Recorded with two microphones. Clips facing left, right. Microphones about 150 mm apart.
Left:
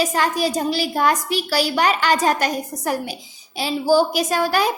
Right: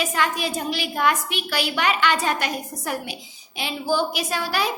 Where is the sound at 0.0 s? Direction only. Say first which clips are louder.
Left 4 dB; 35° left (ahead or behind).